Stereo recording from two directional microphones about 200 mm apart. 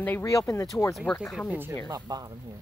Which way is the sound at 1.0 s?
Centre (ahead or behind).